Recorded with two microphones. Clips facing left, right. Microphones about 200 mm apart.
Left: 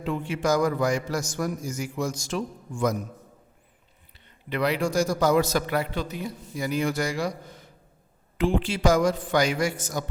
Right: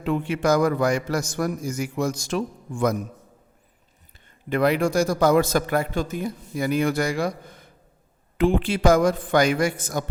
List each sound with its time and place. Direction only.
0.0 s a man's voice: 60° right (ahead or behind)
4.4 s a man's voice: 50° right (ahead or behind)